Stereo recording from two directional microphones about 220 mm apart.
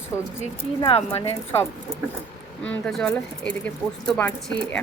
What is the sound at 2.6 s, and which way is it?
Speech, 5° left (ahead or behind).